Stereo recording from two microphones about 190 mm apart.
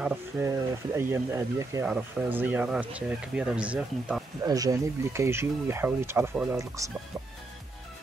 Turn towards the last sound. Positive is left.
turn(degrees=-15)  # may be behind; listen again after turning